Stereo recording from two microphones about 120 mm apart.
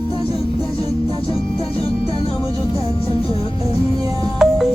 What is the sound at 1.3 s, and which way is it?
Music, 50° left (ahead or behind).